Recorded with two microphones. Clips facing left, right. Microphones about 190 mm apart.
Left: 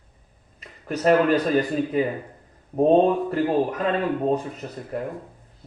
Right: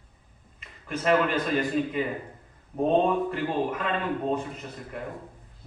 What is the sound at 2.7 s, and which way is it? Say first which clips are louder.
A man's voice: left 5 dB; 40° left (ahead or behind).